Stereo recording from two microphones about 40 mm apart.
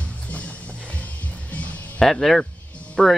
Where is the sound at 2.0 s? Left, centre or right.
Centre.